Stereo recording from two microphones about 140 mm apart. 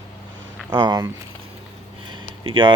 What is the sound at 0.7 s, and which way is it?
Speech, 30° right (ahead or behind).